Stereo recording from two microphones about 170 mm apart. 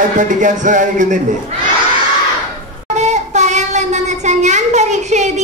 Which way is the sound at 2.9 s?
45° right (ahead or behind).